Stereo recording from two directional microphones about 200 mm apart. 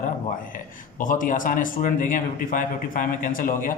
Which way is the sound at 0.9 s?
40° left (ahead or behind).